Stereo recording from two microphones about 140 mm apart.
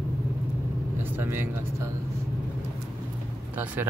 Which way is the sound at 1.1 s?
15° right (ahead or behind).